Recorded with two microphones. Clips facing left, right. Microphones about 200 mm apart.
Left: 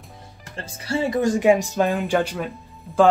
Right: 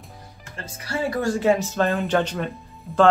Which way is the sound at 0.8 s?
20° left (ahead or behind).